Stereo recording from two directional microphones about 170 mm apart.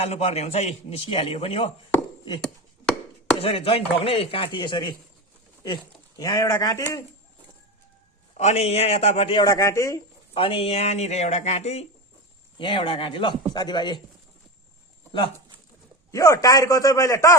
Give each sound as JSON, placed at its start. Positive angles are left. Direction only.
{"t": 0.0, "sound": "a man's voice", "side_deg": 40}
{"t": 3.4, "sound": "a man's voice", "side_deg": 35}
{"t": 8.4, "sound": "a man's voice", "side_deg": 40}
{"t": 10.3, "sound": "a man's voice", "side_deg": 35}
{"t": 12.5, "sound": "speech", "side_deg": 30}
{"t": 16.1, "sound": "speech", "side_deg": 20}